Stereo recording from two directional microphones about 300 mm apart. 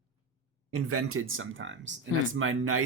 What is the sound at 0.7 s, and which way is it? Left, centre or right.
Speech, right.